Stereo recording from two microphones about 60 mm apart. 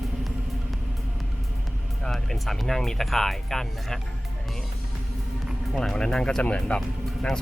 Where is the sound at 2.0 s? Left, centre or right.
Centre.